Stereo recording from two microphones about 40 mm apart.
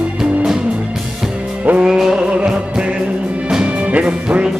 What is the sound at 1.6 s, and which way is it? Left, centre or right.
Music, right.